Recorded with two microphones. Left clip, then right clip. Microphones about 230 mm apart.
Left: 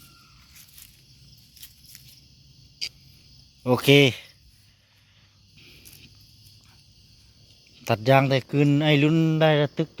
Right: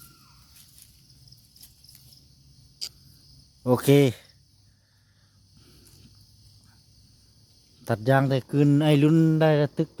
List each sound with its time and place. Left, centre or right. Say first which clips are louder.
2.8 s cricket: left 4 dB; right
3.6 s speech: left 2 dB; centre
7.9 s a man's voice: left 3 dB; centre